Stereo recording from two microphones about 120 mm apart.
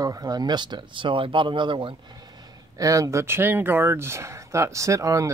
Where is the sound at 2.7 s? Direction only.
30° right (ahead or behind).